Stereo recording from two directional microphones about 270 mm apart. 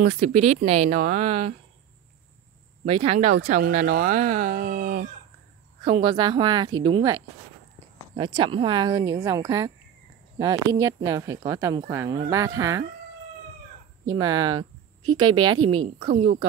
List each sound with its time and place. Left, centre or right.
0.0 s speech: right
2.8 s speech: right
5.9 s speech: centre
8.4 s speech: centre
14.0 s speech: centre